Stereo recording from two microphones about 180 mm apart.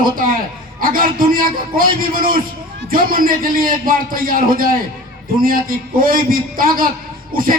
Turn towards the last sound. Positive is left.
turn(degrees=-50)  # may be behind; listen again after turning